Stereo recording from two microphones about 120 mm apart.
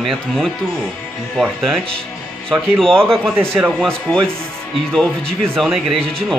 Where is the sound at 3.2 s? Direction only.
20° right (ahead or behind).